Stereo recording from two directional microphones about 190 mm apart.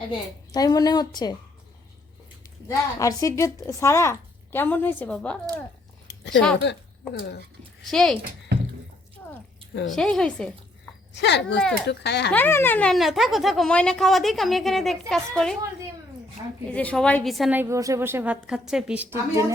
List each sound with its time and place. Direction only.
0.1 s a woman's voice: 20° left (ahead or behind)
2.6 s speech: 15° left (ahead or behind)
6.1 s a sound: 70° left (ahead or behind)
6.6 s speech: 65° left (ahead or behind)
7.9 s a woman's voice: 5° left (ahead or behind)
9.2 s a sound: 10° left (ahead or behind)
9.9 s a woman's voice: centre (ahead or behind)
11.1 s speech: 65° left (ahead or behind)
12.3 s a woman's voice: 10° left (ahead or behind)
16.6 s a woman's voice: 5° left (ahead or behind)
17.6 s a woman's voice: 15° right (ahead or behind)